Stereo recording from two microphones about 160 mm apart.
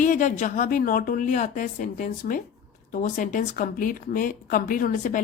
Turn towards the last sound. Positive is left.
turn(degrees=55)  # may be behind; listen again after turning